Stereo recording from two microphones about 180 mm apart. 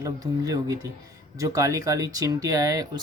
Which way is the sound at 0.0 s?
20° right (ahead or behind).